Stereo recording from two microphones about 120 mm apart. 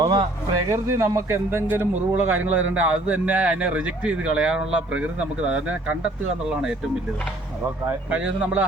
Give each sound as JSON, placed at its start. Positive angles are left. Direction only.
{"t": 0.0, "sound": "a sound", "side_deg": -40}
{"t": 0.7, "sound": "a man's voice", "side_deg": -25}
{"t": 7.9, "sound": "a man's voice", "side_deg": -10}